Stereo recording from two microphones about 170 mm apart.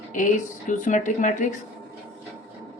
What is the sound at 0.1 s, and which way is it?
Speech, 50° left (ahead or behind).